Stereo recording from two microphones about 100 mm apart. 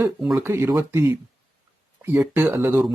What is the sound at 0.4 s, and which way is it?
Speech, 25° right (ahead or behind).